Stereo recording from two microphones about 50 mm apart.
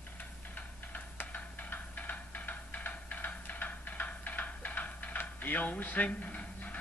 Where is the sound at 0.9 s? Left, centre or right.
Left.